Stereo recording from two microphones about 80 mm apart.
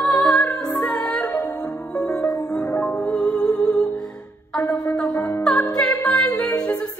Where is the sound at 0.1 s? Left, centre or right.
Centre.